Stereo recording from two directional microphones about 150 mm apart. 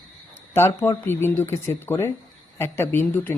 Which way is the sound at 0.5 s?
15° left (ahead or behind).